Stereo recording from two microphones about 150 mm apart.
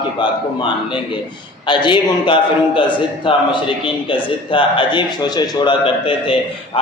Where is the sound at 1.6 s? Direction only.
30° left (ahead or behind).